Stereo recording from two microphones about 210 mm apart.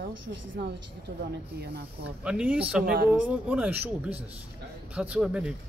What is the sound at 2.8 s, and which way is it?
Speech, 45° right (ahead or behind).